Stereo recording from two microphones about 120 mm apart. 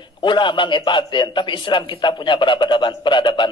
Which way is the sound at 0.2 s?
40° left (ahead or behind).